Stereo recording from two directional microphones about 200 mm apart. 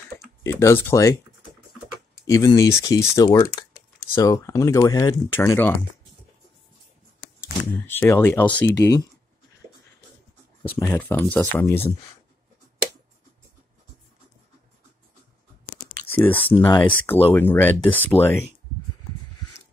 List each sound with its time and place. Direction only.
0.4 s speech: 15° left (ahead or behind)
2.2 s speech: 15° left (ahead or behind)
7.3 s speech: 10° left (ahead or behind)
10.8 s speech: 10° left (ahead or behind)
16.1 s speech: 10° left (ahead or behind)
16.5 s speech: 20° left (ahead or behind)